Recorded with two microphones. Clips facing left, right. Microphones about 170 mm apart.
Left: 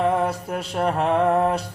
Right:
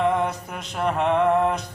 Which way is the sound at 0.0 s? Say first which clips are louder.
Left 1 dB; 35° left (ahead or behind).